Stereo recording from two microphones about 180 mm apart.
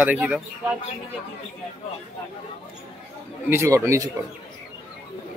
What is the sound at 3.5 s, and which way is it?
Speech, 15° right (ahead or behind).